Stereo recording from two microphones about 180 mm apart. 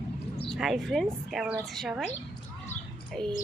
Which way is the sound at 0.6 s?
Centre (ahead or behind).